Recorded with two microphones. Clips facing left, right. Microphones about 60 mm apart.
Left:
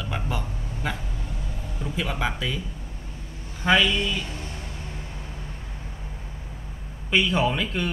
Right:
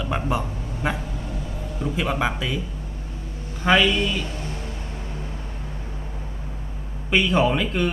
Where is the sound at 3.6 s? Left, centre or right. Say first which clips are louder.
Right 2 dB; centre.